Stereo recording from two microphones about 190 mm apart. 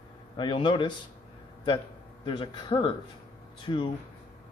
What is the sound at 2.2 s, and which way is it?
Speech, 25° left (ahead or behind).